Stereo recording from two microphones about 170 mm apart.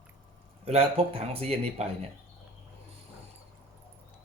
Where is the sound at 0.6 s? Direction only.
35° right (ahead or behind).